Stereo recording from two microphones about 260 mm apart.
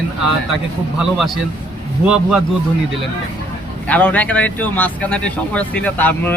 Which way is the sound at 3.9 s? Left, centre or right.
Centre.